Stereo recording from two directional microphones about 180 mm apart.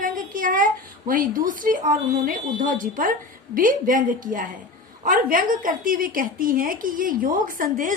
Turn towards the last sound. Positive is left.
turn(degrees=-50)  # may be behind; listen again after turning